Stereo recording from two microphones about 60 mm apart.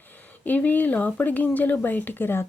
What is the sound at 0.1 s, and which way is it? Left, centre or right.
Speech, left.